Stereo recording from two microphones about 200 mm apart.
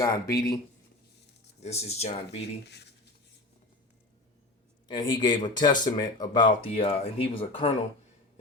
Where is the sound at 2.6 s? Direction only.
55° left (ahead or behind).